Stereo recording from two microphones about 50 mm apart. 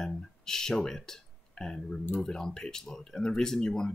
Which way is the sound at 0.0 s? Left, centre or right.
Centre.